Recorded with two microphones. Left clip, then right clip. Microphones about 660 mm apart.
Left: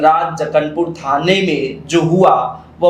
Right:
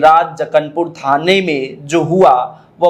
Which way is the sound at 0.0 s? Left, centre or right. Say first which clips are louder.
Right 3 dB; right.